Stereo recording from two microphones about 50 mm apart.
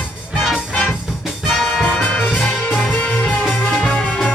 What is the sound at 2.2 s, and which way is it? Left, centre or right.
Music, left.